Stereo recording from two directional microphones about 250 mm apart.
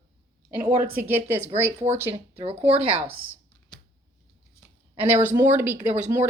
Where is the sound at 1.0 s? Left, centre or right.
Centre.